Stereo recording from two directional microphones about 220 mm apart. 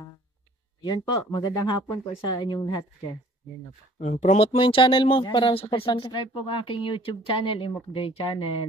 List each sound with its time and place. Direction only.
0.8 s speech: 20° left (ahead or behind)
4.0 s speech: 30° left (ahead or behind)